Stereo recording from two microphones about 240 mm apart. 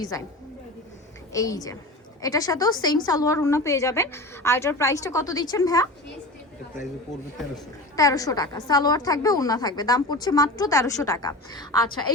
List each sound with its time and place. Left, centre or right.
0.1 s a woman's voice: centre
1.3 s a woman's voice: centre
7.9 s a woman's voice: centre